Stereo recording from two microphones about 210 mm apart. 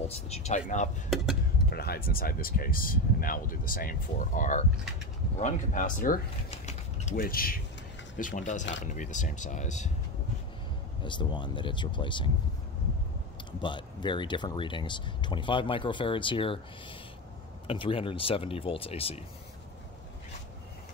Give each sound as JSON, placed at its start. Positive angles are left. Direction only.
{"t": 0.1, "sound": "speech", "side_deg": 30}
{"t": 1.7, "sound": "speech", "side_deg": 50}
{"t": 6.5, "sound": "mechanisms", "side_deg": 30}
{"t": 8.2, "sound": "speech", "side_deg": 35}
{"t": 11.1, "sound": "speech", "side_deg": 20}
{"t": 13.5, "sound": "speech", "side_deg": 20}
{"t": 17.6, "sound": "speech", "side_deg": 25}